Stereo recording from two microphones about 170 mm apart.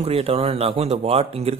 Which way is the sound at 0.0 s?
35° right (ahead or behind).